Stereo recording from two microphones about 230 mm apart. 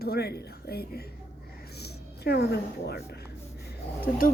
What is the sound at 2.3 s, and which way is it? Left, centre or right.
A woman's voice, left.